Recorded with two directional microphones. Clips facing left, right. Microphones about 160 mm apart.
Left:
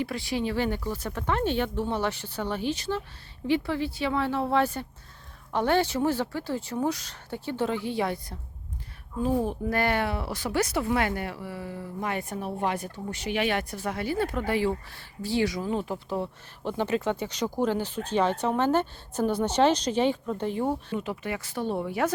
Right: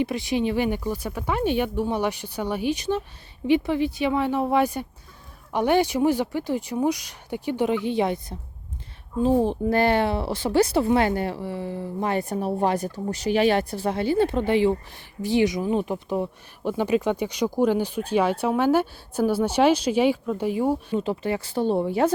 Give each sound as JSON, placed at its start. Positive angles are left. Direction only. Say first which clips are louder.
{"t": 0.0, "sound": "speech", "louder": "right 5 dB", "side_deg": -20}
{"t": 20.9, "sound": "speech", "louder": "right 6 dB", "side_deg": -30}